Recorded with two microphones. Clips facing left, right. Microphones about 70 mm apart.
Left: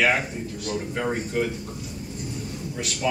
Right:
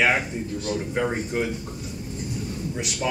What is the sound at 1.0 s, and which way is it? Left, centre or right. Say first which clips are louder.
Speech: even; centre.